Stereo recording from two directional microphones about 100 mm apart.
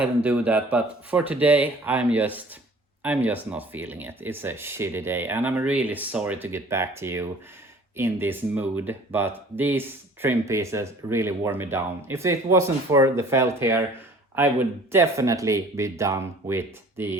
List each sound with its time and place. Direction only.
0.0 s speech: 15° right (ahead or behind)